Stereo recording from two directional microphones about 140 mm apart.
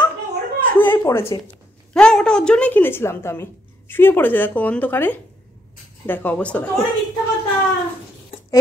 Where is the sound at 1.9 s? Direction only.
5° left (ahead or behind).